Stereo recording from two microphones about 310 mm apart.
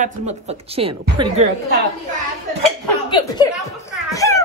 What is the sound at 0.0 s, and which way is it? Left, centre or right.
A woman's voice, right.